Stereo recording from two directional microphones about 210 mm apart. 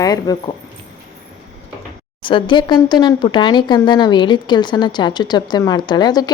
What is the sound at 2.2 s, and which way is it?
A woman's voice, 25° left (ahead or behind).